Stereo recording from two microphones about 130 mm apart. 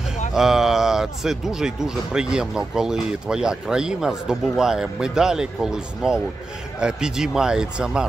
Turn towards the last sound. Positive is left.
turn(degrees=-5)  # may be behind; listen again after turning